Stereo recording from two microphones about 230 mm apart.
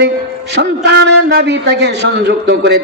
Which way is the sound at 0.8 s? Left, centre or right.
Right.